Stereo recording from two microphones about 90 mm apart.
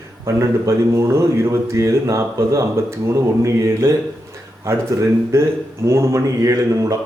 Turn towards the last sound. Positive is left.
turn(degrees=-40)  # may be behind; listen again after turning